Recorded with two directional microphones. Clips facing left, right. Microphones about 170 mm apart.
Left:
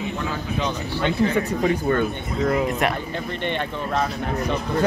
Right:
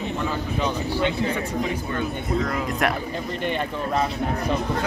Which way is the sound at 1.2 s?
45° left (ahead or behind).